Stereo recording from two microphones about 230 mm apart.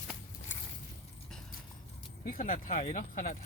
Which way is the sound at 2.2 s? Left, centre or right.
Left.